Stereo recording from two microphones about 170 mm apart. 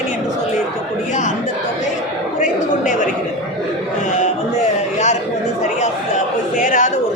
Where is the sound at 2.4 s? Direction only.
50° left (ahead or behind).